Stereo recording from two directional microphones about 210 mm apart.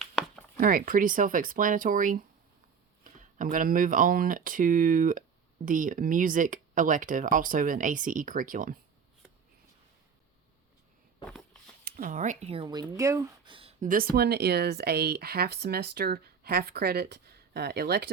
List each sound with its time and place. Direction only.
0.0 s a sound: centre (ahead or behind)
0.6 s speech: 40° right (ahead or behind)
11.9 s speech: 40° right (ahead or behind); by 13.7 s 25° right (ahead or behind)
13.8 s speech: 45° right (ahead or behind)